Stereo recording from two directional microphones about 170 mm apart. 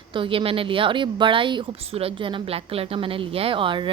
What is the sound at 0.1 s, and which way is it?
A woman's voice, 30° right (ahead or behind).